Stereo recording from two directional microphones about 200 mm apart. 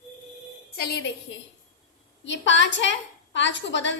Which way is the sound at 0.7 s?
50° left (ahead or behind).